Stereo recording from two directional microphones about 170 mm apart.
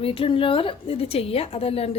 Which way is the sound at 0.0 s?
30° left (ahead or behind).